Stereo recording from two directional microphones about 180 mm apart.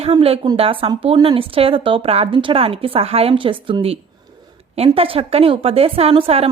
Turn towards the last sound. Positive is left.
turn(degrees=-30)  # may be behind; listen again after turning